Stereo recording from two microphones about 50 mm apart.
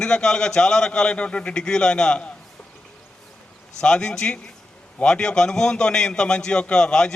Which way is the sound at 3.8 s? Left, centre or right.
Centre.